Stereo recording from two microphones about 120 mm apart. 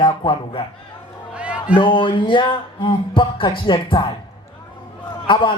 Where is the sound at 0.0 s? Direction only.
45° left (ahead or behind).